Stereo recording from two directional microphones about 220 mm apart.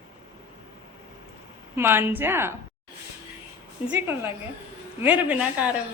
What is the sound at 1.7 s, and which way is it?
Speech, 10° right (ahead or behind).